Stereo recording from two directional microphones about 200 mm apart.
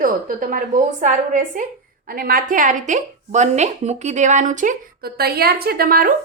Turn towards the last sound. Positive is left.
turn(degrees=-45)  # may be behind; listen again after turning